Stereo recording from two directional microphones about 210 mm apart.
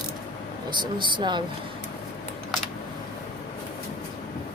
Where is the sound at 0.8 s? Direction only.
20° right (ahead or behind).